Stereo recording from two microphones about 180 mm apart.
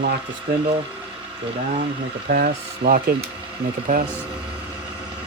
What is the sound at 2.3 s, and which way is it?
Speech, 60° right (ahead or behind).